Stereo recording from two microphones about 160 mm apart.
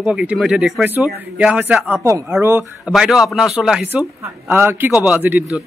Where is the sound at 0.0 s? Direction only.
5° right (ahead or behind).